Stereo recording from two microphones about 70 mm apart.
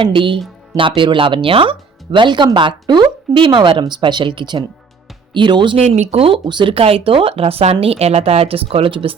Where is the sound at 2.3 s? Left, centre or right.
Right.